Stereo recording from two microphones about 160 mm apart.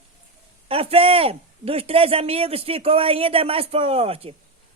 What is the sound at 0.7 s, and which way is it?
A man's voice, 35° right (ahead or behind).